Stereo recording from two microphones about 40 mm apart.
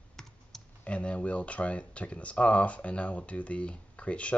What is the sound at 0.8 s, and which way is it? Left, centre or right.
Speech, left.